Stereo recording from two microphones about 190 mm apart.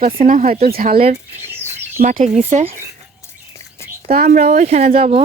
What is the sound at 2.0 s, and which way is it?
Speech, 45° right (ahead or behind).